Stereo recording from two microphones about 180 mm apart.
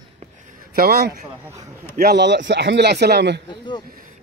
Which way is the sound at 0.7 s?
60° right (ahead or behind).